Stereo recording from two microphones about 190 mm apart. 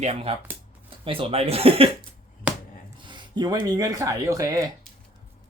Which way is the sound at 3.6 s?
20° right (ahead or behind).